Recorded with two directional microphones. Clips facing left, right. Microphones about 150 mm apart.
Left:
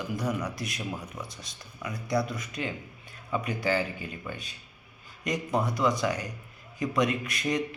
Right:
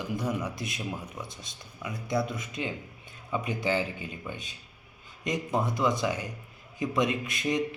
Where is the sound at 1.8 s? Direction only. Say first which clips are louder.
Left 1 dB; 25° right (ahead or behind).